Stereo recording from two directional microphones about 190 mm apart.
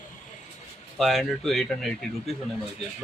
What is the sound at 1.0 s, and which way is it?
Speech, centre (ahead or behind).